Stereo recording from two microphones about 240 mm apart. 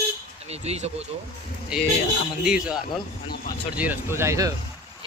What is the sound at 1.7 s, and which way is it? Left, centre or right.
Speech, centre.